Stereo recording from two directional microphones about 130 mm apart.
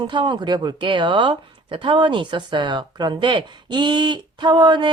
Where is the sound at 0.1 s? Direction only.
35° right (ahead or behind).